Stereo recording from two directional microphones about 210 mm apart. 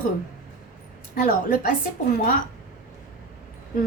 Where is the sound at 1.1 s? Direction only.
40° left (ahead or behind).